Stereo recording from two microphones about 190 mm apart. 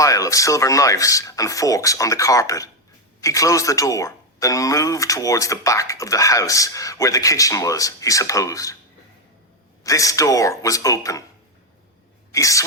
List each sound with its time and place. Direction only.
0.0 s speech: 15° left (ahead or behind)
9.8 s speech: 15° left (ahead or behind)
12.3 s speech: 15° left (ahead or behind)